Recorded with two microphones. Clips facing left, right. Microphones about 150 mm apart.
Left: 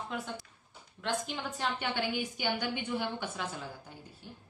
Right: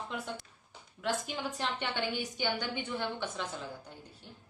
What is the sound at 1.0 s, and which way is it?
A woman's voice, 5° right (ahead or behind).